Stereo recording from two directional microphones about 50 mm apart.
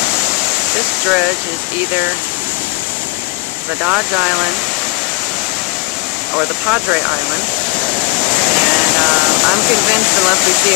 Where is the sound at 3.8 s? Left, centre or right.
Right.